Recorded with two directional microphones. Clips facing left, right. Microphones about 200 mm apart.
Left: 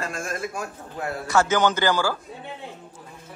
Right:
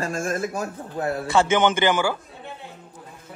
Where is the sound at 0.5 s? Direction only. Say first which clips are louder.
Right 4 dB; 30° right (ahead or behind).